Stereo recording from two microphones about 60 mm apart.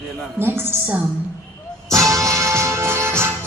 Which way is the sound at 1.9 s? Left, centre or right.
Right.